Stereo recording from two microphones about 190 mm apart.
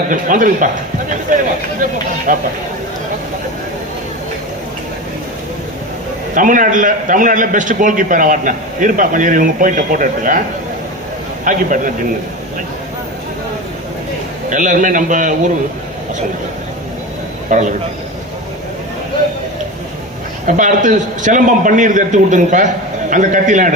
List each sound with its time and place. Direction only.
0.1 s a man's voice: 45° right (ahead or behind)
6.3 s a man's voice: 45° right (ahead or behind)
11.4 s a man's voice: 45° right (ahead or behind)
14.5 s a man's voice: 45° right (ahead or behind)
17.5 s a man's voice: 40° right (ahead or behind)
20.5 s a man's voice: 40° right (ahead or behind)